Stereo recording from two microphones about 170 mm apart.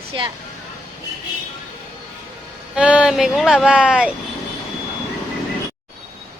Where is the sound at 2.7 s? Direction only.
5° right (ahead or behind).